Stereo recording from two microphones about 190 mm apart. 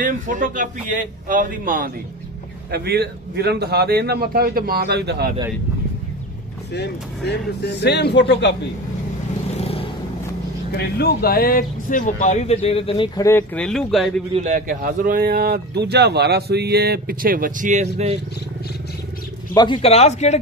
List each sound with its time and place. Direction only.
0.0 s speech: 45° right (ahead or behind)
2.7 s a man's voice: 55° right (ahead or behind)
7.2 s a man's voice: 60° left (ahead or behind)
9.6 s vehicle: 30° left (ahead or behind)
10.7 s speech: 55° left (ahead or behind); by 14.2 s centre (ahead or behind)
14.3 s speech: 40° right (ahead or behind)
19.5 s speech: 25° left (ahead or behind)